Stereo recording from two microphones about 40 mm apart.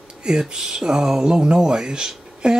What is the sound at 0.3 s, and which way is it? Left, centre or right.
Speech, centre.